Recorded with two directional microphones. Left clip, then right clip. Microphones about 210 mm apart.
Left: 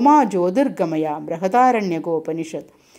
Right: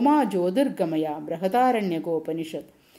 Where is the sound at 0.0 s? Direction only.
20° left (ahead or behind).